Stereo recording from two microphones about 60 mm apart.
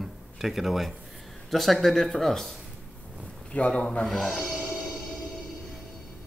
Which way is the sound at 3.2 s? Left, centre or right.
Left.